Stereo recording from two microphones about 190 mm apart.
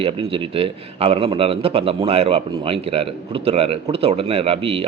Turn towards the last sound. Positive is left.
turn(degrees=-30)  # may be behind; listen again after turning